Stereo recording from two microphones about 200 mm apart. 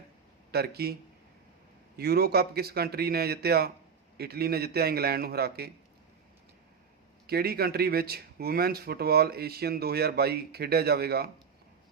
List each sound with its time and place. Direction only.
0.5 s speech: 55° right (ahead or behind)
2.0 s speech: 50° right (ahead or behind)
7.3 s speech: 50° right (ahead or behind)